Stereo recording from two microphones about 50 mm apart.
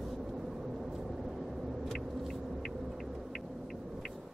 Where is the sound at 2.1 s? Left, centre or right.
Centre.